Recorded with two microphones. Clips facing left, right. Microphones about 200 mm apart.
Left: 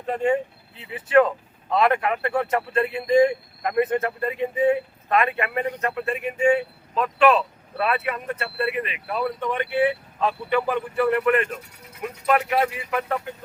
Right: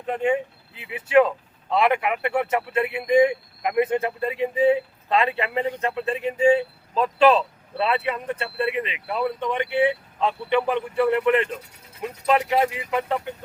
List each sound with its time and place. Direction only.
0.0 s speech: 10° right (ahead or behind)